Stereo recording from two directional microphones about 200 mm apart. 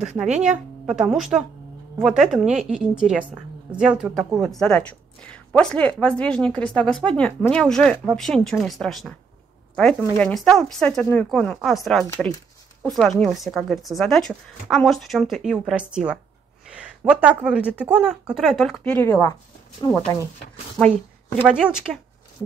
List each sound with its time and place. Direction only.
0.0 s speech: 5° right (ahead or behind)
18.9 s speech: 15° left (ahead or behind)
20.7 s a woman's voice: 5° right (ahead or behind)